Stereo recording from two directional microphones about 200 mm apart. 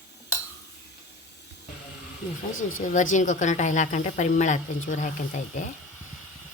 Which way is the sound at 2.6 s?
90° left.